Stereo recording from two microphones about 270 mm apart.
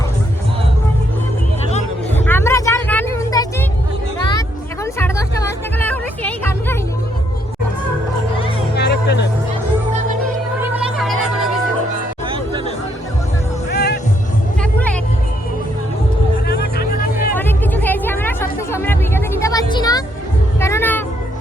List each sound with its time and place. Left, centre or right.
2.1 s vehicle: centre
4.9 s music: centre
8.7 s music: left
10.6 s a sound: centre
13.7 s music: left
14.6 s music: centre
16.5 s music: left
17.3 s music: centre
20.6 s a sound: centre